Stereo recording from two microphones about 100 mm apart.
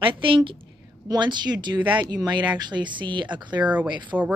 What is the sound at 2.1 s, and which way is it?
Speech, 45° right (ahead or behind).